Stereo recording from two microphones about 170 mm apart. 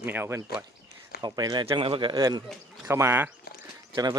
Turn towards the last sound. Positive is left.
turn(degrees=-25)  # may be behind; listen again after turning